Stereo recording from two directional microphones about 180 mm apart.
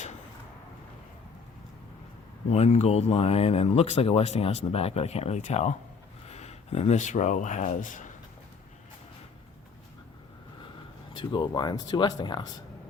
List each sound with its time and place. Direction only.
2.5 s speech: 40° left (ahead or behind)
11.1 s speech: 25° left (ahead or behind)